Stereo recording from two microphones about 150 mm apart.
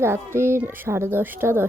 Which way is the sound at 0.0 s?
15° right (ahead or behind).